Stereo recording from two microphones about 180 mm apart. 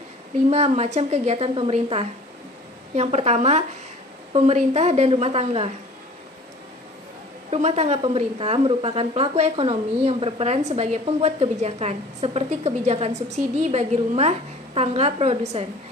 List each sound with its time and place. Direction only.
0.5 s a woman's voice: 35° right (ahead or behind)
7.5 s a woman's voice: 35° right (ahead or behind)